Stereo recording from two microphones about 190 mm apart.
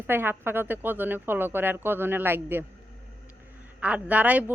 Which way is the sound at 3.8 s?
5° right (ahead or behind).